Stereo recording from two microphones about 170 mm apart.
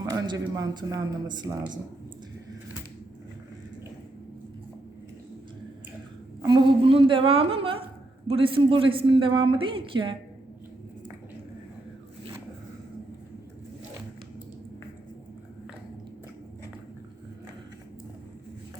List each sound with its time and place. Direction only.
0.0 s speech: 20° right (ahead or behind)
6.4 s a woman's voice: 25° right (ahead or behind)